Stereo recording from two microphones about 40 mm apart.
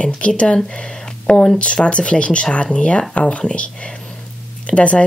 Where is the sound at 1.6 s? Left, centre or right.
Left.